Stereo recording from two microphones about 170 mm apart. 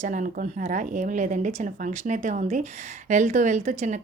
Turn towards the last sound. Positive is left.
turn(degrees=-45)  # may be behind; listen again after turning